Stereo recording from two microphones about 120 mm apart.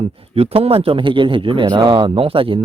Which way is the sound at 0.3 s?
55° right (ahead or behind).